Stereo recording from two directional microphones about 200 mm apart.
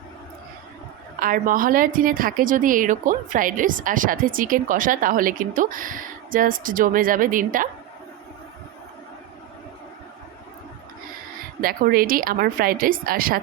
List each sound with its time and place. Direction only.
1.2 s a woman's voice: 45° right (ahead or behind)
11.6 s a woman's voice: 45° right (ahead or behind)